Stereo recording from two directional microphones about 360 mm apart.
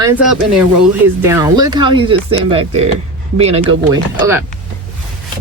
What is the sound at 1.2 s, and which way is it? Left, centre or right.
Speech, centre.